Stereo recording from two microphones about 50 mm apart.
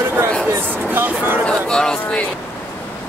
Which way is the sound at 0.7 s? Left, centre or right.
Right.